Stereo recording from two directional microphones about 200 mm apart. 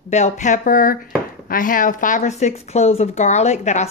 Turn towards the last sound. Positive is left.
turn(degrees=35)  # may be behind; listen again after turning